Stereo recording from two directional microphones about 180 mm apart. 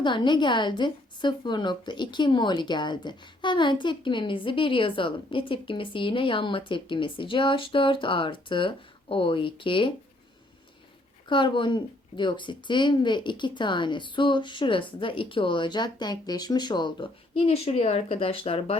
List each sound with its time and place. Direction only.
0.0 s a woman's voice: 25° left (ahead or behind)
11.3 s a woman's voice: 25° left (ahead or behind)